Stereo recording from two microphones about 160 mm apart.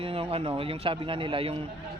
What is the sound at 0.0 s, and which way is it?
Speech, 35° right (ahead or behind).